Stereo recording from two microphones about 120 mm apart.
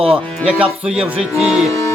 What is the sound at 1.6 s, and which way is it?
Music, 25° left (ahead or behind).